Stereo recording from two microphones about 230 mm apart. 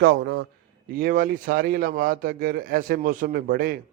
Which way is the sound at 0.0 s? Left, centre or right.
Right.